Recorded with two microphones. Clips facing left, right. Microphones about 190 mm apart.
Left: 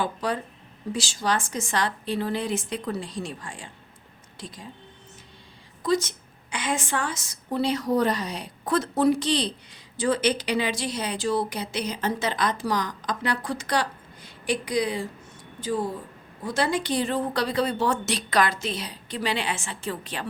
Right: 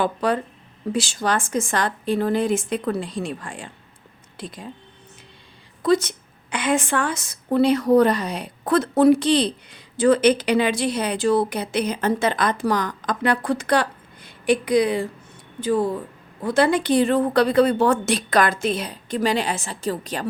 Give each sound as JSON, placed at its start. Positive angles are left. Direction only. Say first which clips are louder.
{"t": 0.0, "sound": "a woman's voice", "louder": "right 6 dB", "side_deg": -60}
{"t": 5.8, "sound": "a woman's voice", "louder": "right 5 dB", "side_deg": -60}